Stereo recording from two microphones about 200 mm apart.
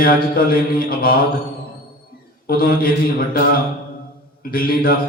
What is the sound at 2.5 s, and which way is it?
Mantra, 50° left (ahead or behind).